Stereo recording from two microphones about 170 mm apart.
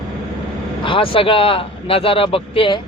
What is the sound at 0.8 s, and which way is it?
Speech, 30° left (ahead or behind).